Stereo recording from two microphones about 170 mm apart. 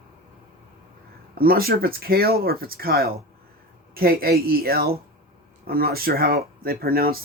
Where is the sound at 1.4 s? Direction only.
60° right (ahead or behind).